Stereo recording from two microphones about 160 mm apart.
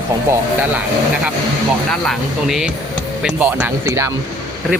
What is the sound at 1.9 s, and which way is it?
Speech, centre (ahead or behind).